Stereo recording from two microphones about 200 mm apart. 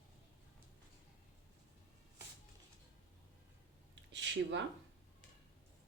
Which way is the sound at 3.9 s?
65° right (ahead or behind).